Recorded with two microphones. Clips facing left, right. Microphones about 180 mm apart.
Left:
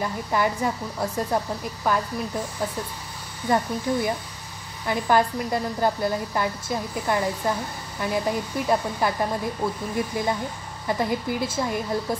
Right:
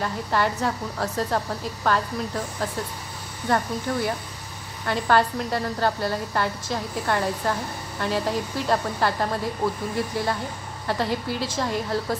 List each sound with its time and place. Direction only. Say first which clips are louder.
0.0 s a woman's voice: even; 10° left (ahead or behind)